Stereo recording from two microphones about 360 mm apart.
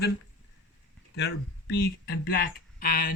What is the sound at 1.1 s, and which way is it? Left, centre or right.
Speech, left.